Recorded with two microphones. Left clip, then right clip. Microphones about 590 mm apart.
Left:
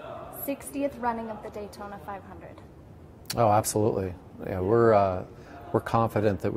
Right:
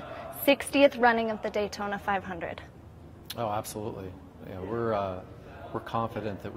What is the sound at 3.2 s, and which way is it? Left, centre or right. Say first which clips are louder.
Speech: left 9 dB; left.